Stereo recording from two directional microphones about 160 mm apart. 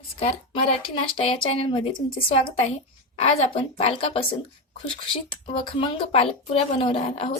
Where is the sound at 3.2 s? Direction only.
35° left (ahead or behind).